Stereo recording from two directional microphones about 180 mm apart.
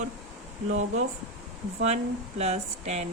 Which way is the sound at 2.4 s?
40° right (ahead or behind).